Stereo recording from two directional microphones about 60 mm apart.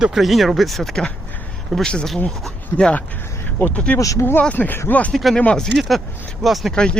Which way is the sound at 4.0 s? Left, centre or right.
Left.